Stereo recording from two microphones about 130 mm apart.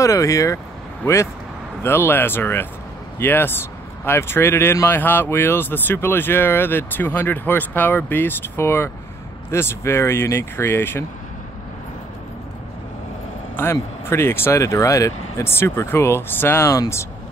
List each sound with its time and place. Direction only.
0.0 s speech: 25° left (ahead or behind)
13.6 s speech: 20° left (ahead or behind)